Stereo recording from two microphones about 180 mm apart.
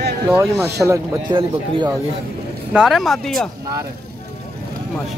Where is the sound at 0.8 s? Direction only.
20° right (ahead or behind).